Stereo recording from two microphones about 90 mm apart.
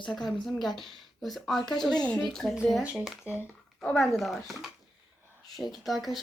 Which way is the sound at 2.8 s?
10° right (ahead or behind).